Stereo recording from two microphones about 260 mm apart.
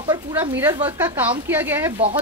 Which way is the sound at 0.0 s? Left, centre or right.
Centre.